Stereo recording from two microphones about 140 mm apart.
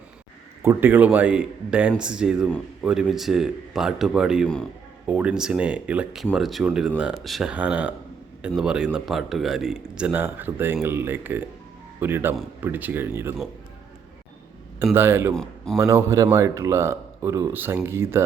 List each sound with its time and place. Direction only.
0.6 s speech: 15° right (ahead or behind); by 4.7 s 5° left (ahead or behind)
5.0 s speech: 10° right (ahead or behind)
14.9 s speech: 15° right (ahead or behind)
15.4 s speech: 5° left (ahead or behind)
15.8 s speech: 20° right (ahead or behind)